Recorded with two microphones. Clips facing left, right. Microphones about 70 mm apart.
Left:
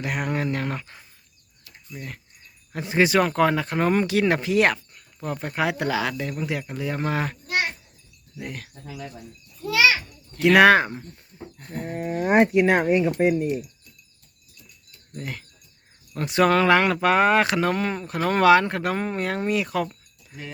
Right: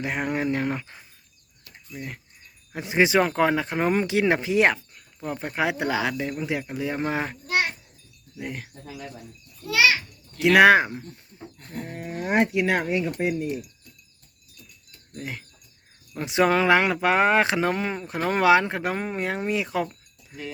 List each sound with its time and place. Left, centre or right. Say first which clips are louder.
0.0 s speech: even; right
8.4 s speech: right 1 dB; right
10.4 s speech: even; centre
11.5 s speech: left 4 dB; left
13.3 s speech: left 4 dB; left
15.2 s speech: even; centre